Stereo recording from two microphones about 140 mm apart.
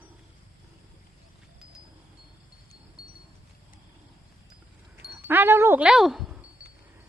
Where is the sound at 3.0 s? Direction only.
90° left.